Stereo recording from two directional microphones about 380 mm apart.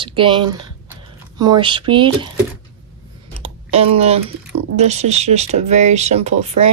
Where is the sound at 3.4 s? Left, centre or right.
Centre.